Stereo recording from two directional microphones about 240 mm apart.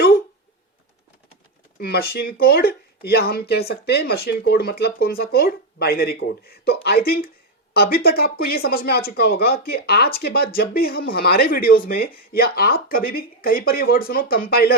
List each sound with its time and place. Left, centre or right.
1.8 s speech: left